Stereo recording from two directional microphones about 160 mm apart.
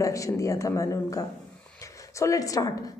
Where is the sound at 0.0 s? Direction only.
20° left (ahead or behind).